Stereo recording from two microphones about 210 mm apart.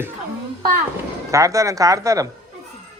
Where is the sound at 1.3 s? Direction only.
15° right (ahead or behind).